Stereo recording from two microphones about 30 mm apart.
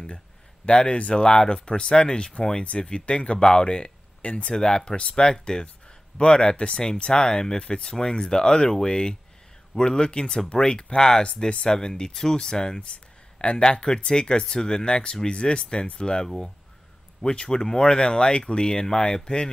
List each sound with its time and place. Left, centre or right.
0.7 s speech: left
1.1 s speech: left
12.9 s a sound: left
13.6 s speech: left